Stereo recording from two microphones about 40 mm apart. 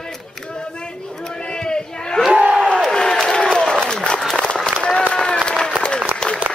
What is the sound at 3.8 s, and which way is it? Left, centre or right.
Run, centre.